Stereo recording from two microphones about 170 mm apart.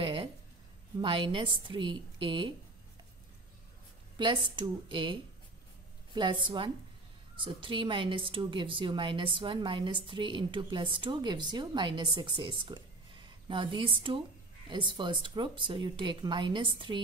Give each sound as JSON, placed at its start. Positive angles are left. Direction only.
{"t": 0.0, "sound": "a sound", "side_deg": -30}
{"t": 0.9, "sound": "speech", "side_deg": -30}
{"t": 4.2, "sound": "speech", "side_deg": -30}
{"t": 6.4, "sound": "speech", "side_deg": -30}